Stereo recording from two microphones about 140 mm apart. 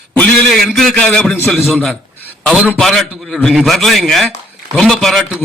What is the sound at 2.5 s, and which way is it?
A man's voice, 10° right (ahead or behind).